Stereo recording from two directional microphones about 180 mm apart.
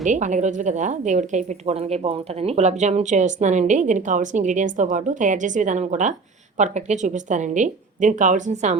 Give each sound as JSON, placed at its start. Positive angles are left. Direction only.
{"t": 0.0, "sound": "a woman's voice", "side_deg": -45}